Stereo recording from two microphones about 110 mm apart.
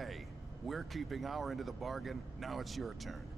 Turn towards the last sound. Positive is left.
turn(degrees=0)  # may be behind; listen again after turning